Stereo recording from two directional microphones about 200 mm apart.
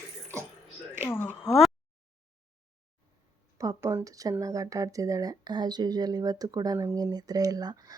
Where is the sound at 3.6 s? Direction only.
15° right (ahead or behind).